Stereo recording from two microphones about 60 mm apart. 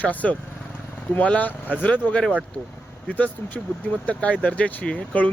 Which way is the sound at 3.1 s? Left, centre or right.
Left.